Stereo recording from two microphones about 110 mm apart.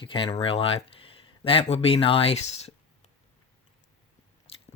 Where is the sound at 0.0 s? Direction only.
50° left (ahead or behind).